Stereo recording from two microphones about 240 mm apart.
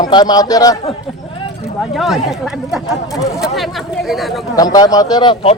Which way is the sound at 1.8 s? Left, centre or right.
Centre.